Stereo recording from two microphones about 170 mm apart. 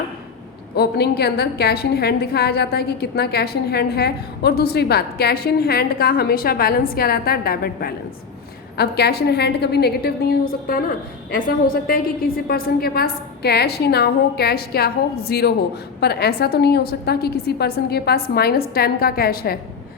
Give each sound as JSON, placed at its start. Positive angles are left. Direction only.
{"t": 0.8, "sound": "a woman's voice", "side_deg": 70}